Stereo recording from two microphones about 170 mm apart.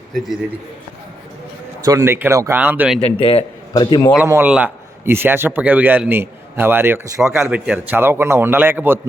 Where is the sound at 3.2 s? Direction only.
30° left (ahead or behind).